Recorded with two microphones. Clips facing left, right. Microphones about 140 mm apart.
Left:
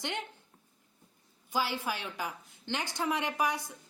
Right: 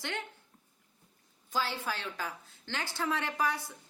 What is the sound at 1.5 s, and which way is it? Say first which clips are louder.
A woman's voice: left 2 dB; 10° left (ahead or behind).